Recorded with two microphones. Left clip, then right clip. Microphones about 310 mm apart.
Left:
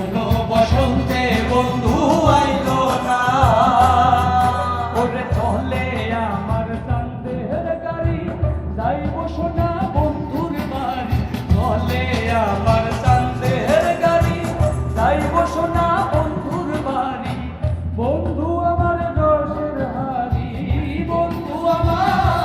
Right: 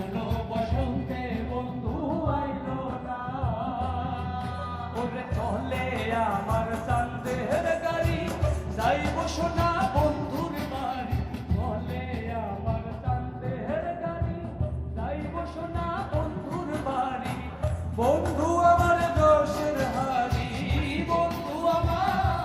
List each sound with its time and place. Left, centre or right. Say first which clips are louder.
0.1 s music: left 15 dB; centre
5.0 s music: left 11 dB; centre
9.6 s music: left 3 dB; right
11.5 s music: left 13 dB; centre
12.3 s music: left 16 dB; left
14.9 s music: left 17 dB; left
15.7 s music: left 14 dB; centre
18.9 s music: left 4 dB; right
21.1 s music: left 6 dB; centre